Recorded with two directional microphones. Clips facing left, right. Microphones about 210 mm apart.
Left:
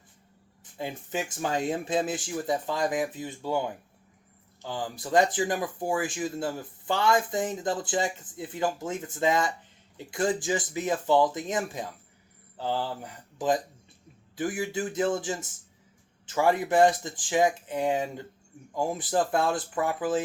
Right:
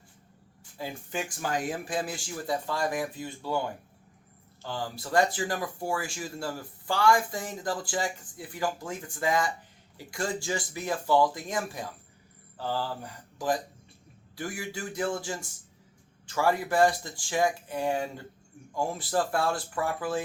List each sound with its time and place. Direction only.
0.8 s speech: 20° left (ahead or behind)
4.6 s speech: 20° left (ahead or behind)